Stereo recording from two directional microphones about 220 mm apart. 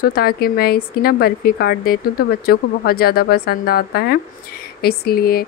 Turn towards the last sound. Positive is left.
turn(degrees=45)  # may be behind; listen again after turning